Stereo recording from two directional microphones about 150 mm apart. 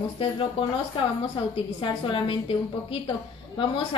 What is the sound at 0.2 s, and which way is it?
Speech, 35° left (ahead or behind).